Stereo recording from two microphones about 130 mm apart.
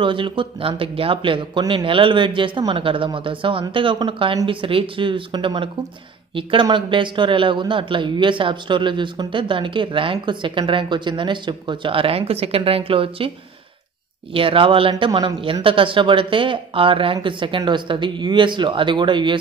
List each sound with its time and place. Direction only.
0.0 s a man's voice: 40° right (ahead or behind)
14.3 s a man's voice: 45° right (ahead or behind)